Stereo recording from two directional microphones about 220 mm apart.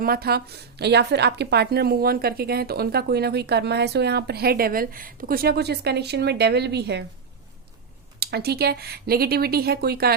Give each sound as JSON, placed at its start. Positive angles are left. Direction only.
{"t": 0.0, "sound": "a woman's voice", "side_deg": -45}
{"t": 8.2, "sound": "a woman's voice", "side_deg": -45}